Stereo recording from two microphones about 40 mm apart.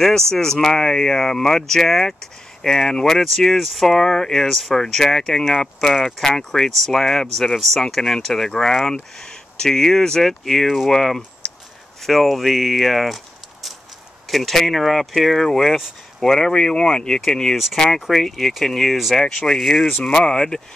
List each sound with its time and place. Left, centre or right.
0.0 s speech: centre
15.4 s speech: centre